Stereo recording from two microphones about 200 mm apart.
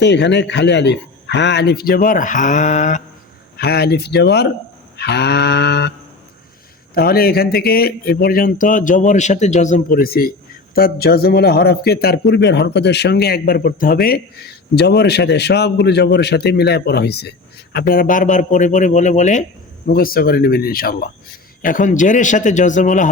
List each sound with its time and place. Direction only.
0.0 s speech: 60° left (ahead or behind); by 3.0 s 35° left (ahead or behind)
3.6 s speech: 50° left (ahead or behind)
6.9 s a man's voice: 50° left (ahead or behind)
19.9 s a man's voice: 45° left (ahead or behind)